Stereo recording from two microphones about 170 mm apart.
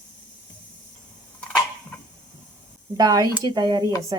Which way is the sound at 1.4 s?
5° left (ahead or behind).